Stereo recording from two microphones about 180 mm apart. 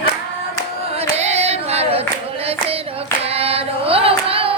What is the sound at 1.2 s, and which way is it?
Singing, 35° right (ahead or behind).